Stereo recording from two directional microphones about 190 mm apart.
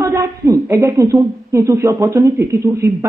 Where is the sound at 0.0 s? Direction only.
15° right (ahead or behind).